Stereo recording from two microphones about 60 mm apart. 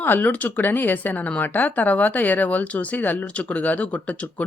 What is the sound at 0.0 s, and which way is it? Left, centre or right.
Speech, left.